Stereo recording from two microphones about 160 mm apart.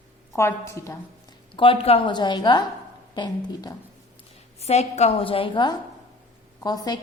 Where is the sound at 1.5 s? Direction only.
35° left (ahead or behind).